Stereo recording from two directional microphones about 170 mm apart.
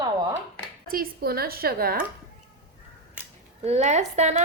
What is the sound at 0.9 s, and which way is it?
A woman's voice, 60° right (ahead or behind).